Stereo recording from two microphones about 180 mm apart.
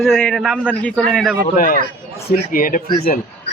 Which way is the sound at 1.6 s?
50° left (ahead or behind).